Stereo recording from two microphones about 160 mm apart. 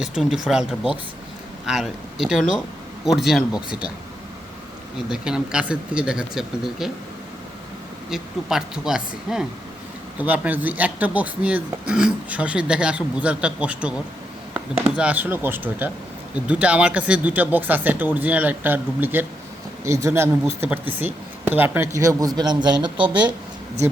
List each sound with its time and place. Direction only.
0.0 s speech: 5° right (ahead or behind)
4.9 s speech: 5° right (ahead or behind)
8.1 s speech: 5° right (ahead or behind)
14.9 s speech: 10° right (ahead or behind); by 23.0 s 30° right (ahead or behind)